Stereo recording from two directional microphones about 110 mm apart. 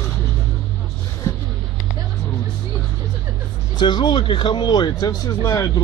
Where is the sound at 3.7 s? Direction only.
40° left (ahead or behind).